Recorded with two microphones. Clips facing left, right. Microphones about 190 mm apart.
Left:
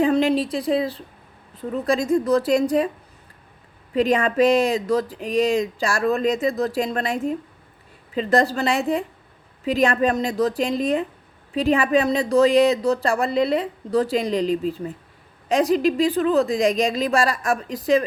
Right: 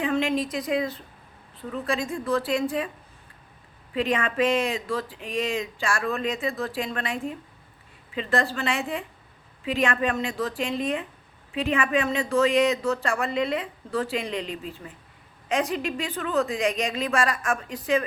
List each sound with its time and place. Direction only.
0.0 s speech: 35° left (ahead or behind)
3.9 s speech: 40° left (ahead or behind)